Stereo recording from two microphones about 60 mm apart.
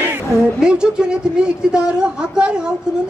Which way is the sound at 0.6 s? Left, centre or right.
Centre.